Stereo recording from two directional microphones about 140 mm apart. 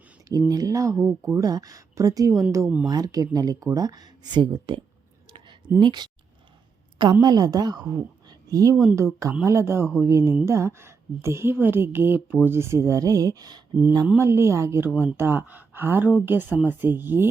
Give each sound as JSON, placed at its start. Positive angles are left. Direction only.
{"t": 0.3, "sound": "a woman's voice", "side_deg": -25}
{"t": 5.8, "sound": "a woman's voice", "side_deg": -35}
{"t": 8.7, "sound": "a woman's voice", "side_deg": -5}
{"t": 9.3, "sound": "a woman's voice", "side_deg": -20}